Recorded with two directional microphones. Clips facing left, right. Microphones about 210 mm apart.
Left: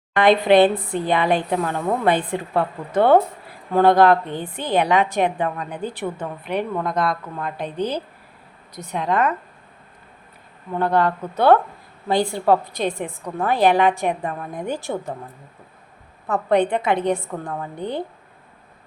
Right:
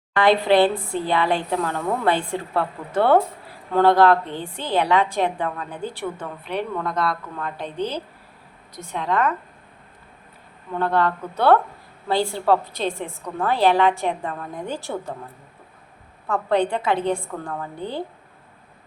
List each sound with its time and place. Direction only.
0.2 s a woman's voice: 20° left (ahead or behind)
10.8 s a woman's voice: 15° left (ahead or behind)
16.3 s a woman's voice: 20° left (ahead or behind)